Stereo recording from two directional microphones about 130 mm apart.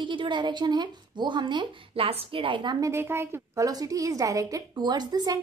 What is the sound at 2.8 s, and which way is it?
A woman's voice, 20° right (ahead or behind).